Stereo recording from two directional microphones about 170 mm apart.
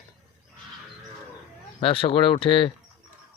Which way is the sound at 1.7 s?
35° left (ahead or behind).